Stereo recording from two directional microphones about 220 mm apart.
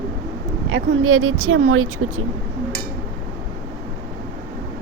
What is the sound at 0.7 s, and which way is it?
Speech, 70° right (ahead or behind).